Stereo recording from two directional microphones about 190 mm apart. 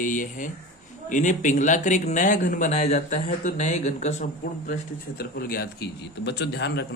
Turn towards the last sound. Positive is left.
turn(degrees=60)  # may be behind; listen again after turning